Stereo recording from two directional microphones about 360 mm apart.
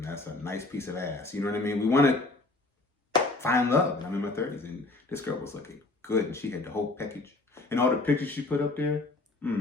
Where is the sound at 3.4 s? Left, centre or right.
Centre.